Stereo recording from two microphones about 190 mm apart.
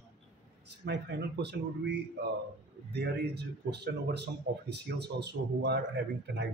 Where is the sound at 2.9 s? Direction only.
60° right (ahead or behind).